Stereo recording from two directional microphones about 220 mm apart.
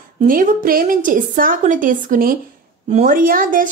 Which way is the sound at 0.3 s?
40° right (ahead or behind).